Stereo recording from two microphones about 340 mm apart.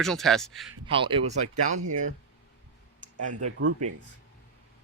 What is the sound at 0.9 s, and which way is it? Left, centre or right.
Speech, centre.